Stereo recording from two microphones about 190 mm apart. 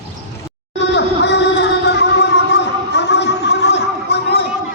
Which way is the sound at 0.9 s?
65° left (ahead or behind).